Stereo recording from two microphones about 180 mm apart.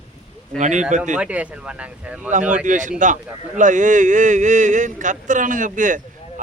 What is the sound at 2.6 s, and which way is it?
A man's voice, 45° right (ahead or behind).